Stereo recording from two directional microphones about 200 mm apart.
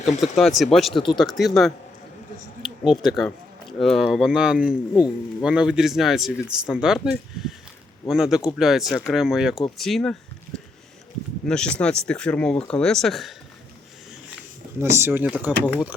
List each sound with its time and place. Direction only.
0.2 s speech: centre (ahead or behind)
0.9 s speech: 25° left (ahead or behind)
1.2 s speech: centre (ahead or behind)
11.4 s speech: 5° left (ahead or behind)
14.8 s speech: 15° right (ahead or behind)